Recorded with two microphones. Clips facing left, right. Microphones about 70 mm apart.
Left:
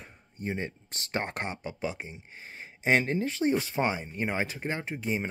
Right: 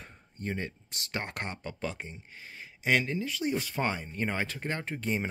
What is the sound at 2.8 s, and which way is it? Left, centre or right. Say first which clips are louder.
Speech: left 3 dB; left.